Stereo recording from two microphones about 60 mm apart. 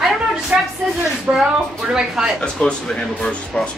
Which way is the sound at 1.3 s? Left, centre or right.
Right.